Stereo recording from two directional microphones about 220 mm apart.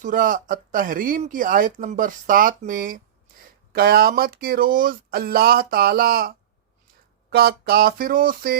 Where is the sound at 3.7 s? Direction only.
45° right (ahead or behind).